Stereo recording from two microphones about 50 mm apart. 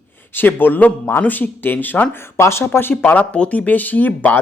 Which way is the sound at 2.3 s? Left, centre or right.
Left.